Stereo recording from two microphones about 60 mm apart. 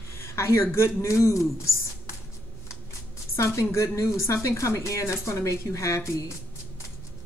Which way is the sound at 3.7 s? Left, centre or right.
Left.